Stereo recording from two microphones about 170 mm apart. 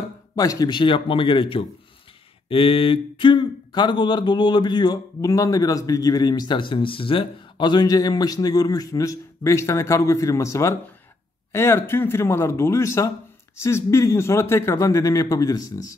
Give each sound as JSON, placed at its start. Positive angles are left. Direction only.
{"t": 0.4, "sound": "speech", "side_deg": 20}